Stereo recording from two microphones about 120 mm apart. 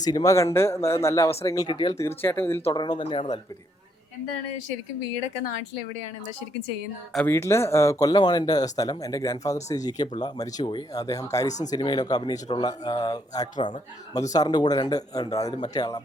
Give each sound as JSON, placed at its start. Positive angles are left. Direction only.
{"t": 0.0, "sound": "speech", "side_deg": 30}
{"t": 2.0, "sound": "speech", "side_deg": 20}
{"t": 2.7, "sound": "speech", "side_deg": 35}
{"t": 7.3, "sound": "speech", "side_deg": 20}
{"t": 11.7, "sound": "speech", "side_deg": 40}